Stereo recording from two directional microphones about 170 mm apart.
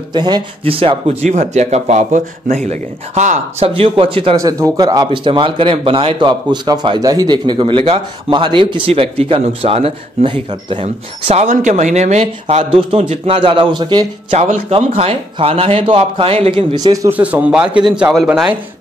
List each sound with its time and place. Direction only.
0.1 s speech: 25° right (ahead or behind)
4.4 s speech: 20° right (ahead or behind)
14.3 s speech: 45° right (ahead or behind)
14.7 s speech: 35° right (ahead or behind)
17.2 s a man's voice: 10° right (ahead or behind)